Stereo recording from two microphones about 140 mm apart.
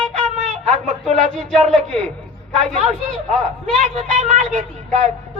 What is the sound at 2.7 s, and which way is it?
A woman's voice, 55° right (ahead or behind).